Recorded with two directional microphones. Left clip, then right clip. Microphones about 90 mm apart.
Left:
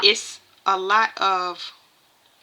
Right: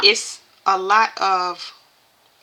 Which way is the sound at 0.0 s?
20° left (ahead or behind).